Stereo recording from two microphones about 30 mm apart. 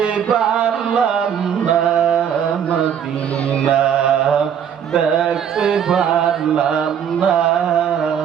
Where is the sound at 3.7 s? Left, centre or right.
Right.